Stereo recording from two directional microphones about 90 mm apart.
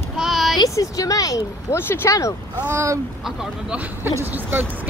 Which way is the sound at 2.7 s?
35° right (ahead or behind).